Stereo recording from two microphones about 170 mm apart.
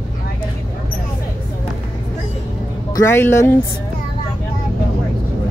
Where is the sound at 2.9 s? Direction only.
20° left (ahead or behind).